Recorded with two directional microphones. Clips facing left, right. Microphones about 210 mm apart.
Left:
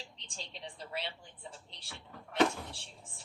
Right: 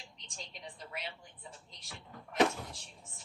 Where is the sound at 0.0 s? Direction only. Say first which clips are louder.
Left 2 dB; 30° left (ahead or behind).